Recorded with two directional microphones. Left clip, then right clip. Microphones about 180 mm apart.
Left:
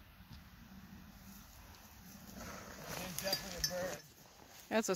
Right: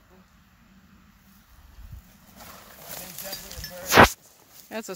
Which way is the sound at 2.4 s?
40° right (ahead or behind).